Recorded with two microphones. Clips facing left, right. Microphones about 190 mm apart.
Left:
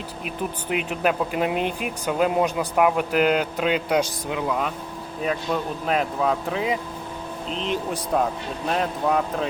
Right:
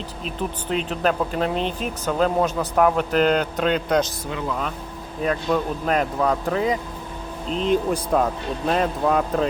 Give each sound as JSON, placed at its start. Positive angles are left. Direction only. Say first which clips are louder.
{"t": 0.3, "sound": "speech", "louder": "right 1 dB", "side_deg": 10}
{"t": 7.5, "sound": "speech", "louder": "right 7 dB", "side_deg": -40}
{"t": 8.1, "sound": "speech", "louder": "even", "side_deg": 0}